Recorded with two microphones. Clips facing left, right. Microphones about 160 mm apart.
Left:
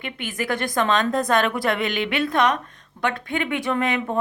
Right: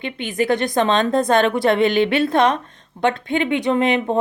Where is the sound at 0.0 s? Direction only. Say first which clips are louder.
Right 7 dB; 25° right (ahead or behind).